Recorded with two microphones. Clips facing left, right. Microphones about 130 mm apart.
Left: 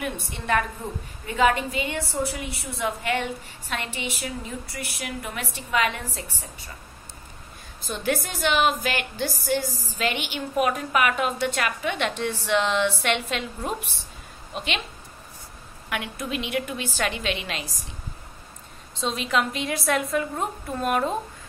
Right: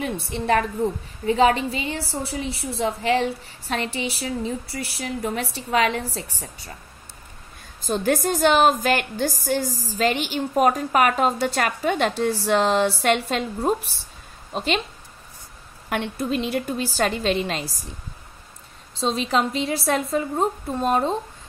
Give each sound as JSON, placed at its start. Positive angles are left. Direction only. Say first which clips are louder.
{"t": 0.0, "sound": "a woman's voice", "louder": "right 5 dB", "side_deg": -35}
{"t": 7.8, "sound": "a woman's voice", "louder": "right 5 dB", "side_deg": -45}
{"t": 15.9, "sound": "a woman's voice", "louder": "right 5 dB", "side_deg": -35}
{"t": 18.9, "sound": "a woman's voice", "louder": "right 3 dB", "side_deg": -30}